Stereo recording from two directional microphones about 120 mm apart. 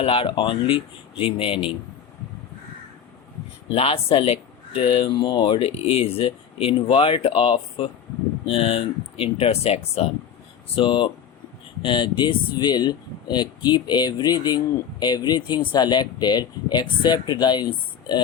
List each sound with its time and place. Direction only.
0.0 s speech: 50° left (ahead or behind)
3.7 s speech: 50° left (ahead or behind)
10.8 s speech: 45° left (ahead or behind)